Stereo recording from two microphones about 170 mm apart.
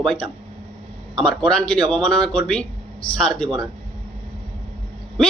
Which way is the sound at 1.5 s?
5° left (ahead or behind).